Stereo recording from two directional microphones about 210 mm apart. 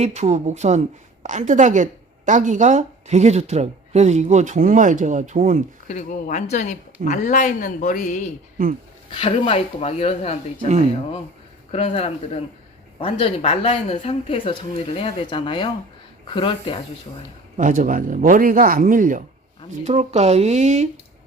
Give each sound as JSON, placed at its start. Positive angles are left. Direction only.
{"t": 0.0, "sound": "a woman's voice", "side_deg": -30}
{"t": 5.9, "sound": "speech", "side_deg": 35}
{"t": 9.0, "sound": "speech", "side_deg": 25}
{"t": 11.7, "sound": "speech", "side_deg": 30}
{"t": 17.6, "sound": "a woman's voice", "side_deg": -40}